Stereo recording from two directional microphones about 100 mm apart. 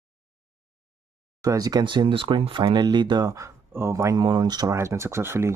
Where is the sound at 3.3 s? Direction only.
30° right (ahead or behind).